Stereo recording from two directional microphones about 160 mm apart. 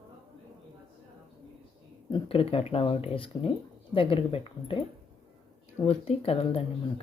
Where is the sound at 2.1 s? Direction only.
35° left (ahead or behind).